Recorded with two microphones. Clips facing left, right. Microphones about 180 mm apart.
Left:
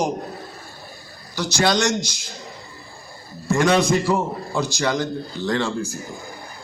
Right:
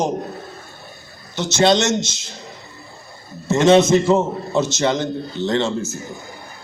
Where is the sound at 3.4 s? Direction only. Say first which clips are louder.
Right 5 dB; 25° right (ahead or behind).